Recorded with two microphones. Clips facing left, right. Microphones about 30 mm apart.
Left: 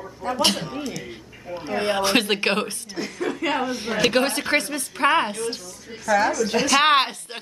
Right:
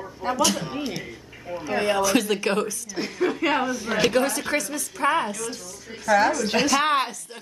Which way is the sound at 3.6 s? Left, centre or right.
Left.